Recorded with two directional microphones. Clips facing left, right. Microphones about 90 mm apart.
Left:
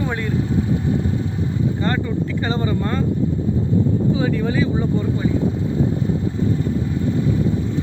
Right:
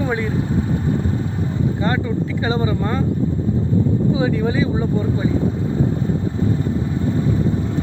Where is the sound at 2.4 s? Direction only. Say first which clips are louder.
Right 2 dB; 15° right (ahead or behind).